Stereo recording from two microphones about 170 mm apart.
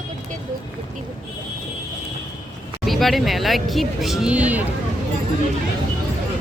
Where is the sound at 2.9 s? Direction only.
Centre (ahead or behind).